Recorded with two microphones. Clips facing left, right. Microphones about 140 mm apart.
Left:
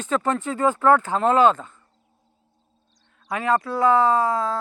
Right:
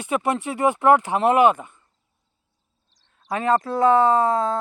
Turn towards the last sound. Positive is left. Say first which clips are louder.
# right 2 dB
turn(degrees=-25)  # may be behind; listen again after turning